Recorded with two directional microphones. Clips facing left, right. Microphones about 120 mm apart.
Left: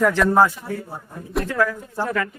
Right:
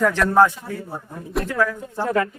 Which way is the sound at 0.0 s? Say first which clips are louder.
Even; 5° left (ahead or behind).